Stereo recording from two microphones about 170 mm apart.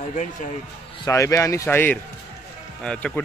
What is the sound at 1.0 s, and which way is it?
Speech, 20° left (ahead or behind).